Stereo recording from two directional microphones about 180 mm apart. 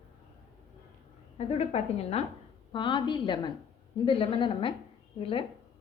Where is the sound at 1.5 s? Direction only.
35° left (ahead or behind).